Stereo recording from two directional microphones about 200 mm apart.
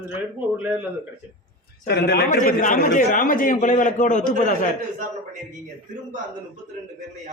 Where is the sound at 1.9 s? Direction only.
55° left (ahead or behind).